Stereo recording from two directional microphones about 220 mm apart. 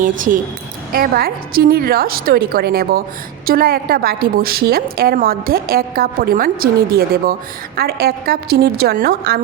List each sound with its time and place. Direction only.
0.0 s a woman's voice: 35° right (ahead or behind)